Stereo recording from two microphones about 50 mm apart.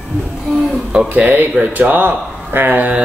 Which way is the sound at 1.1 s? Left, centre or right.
Right.